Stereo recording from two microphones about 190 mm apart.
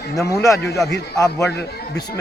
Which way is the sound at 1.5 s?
60° left (ahead or behind).